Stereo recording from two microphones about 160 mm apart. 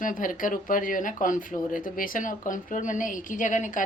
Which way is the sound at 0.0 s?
55° left (ahead or behind).